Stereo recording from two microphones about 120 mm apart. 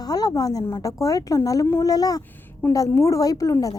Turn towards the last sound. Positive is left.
turn(degrees=30)  # may be behind; listen again after turning